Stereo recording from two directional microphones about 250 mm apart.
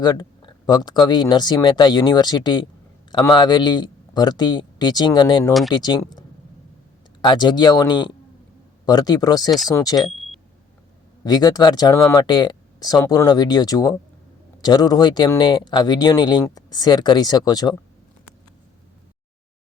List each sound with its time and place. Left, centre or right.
0.0 s speech: centre
7.2 s speech: centre
10.1 s a sound: centre
11.2 s speech: centre